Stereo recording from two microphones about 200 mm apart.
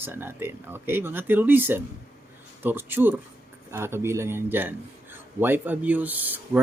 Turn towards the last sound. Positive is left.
turn(degrees=-10)  # may be behind; listen again after turning